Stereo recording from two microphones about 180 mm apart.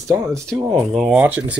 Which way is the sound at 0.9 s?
Centre (ahead or behind).